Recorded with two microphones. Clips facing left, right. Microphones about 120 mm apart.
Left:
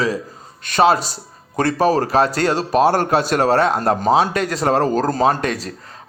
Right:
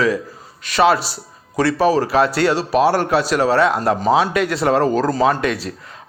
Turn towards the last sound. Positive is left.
turn(degrees=40)  # may be behind; listen again after turning